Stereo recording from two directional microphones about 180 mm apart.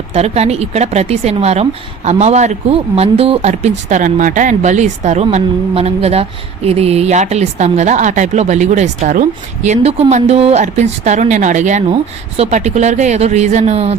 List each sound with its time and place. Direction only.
0.1 s speech: 35° right (ahead or behind)